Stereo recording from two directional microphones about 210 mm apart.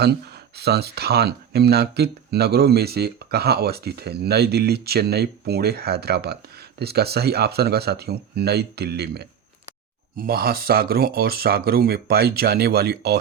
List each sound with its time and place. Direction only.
0.0 s speech: 50° right (ahead or behind)